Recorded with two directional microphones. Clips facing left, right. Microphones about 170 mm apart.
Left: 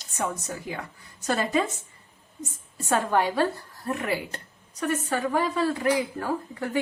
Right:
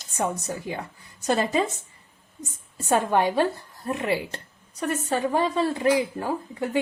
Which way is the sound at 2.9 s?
20° right (ahead or behind).